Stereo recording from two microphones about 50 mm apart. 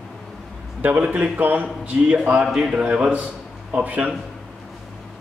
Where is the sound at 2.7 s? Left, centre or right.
Right.